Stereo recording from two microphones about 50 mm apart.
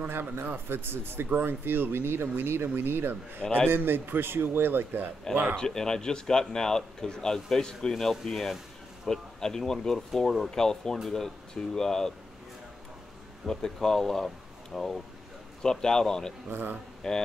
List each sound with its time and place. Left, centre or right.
0.0 s speech: right
5.6 s speech: centre
13.5 s speech: centre
16.4 s speech: right
17.0 s speech: centre